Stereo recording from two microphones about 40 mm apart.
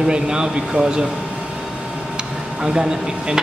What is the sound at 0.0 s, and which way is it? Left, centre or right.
Speech, centre.